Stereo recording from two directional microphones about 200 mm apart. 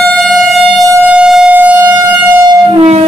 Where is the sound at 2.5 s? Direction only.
30° right (ahead or behind).